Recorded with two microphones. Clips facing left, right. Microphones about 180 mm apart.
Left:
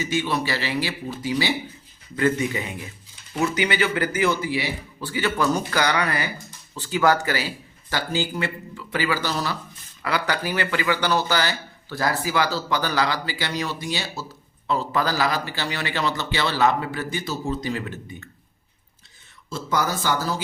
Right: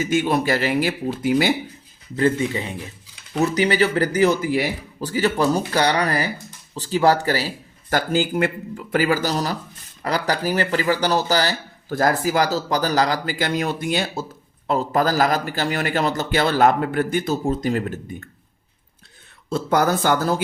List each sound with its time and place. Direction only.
0.0 s a man's voice: 50° right (ahead or behind)
2.1 s speech: 30° right (ahead or behind)
7.9 s a man's voice: 50° right (ahead or behind)
19.5 s speech: 60° right (ahead or behind)